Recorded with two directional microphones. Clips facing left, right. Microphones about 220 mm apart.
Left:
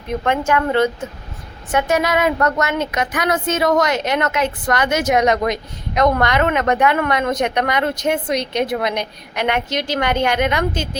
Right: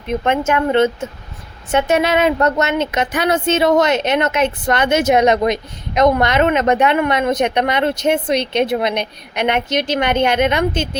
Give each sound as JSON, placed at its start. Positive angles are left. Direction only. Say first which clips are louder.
{"t": 0.3, "sound": "a woman's voice", "louder": "right 1 dB", "side_deg": -20}